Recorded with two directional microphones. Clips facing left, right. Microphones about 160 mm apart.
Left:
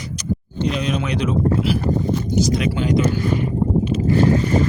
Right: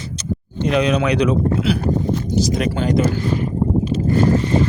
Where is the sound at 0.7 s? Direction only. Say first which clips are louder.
Right 6 dB; 70° right (ahead or behind).